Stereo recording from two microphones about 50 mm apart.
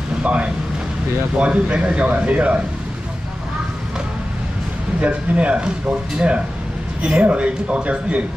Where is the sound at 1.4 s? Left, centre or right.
Right.